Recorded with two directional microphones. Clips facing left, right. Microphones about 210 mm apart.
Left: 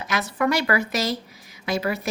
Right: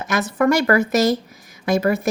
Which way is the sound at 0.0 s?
45° right (ahead or behind).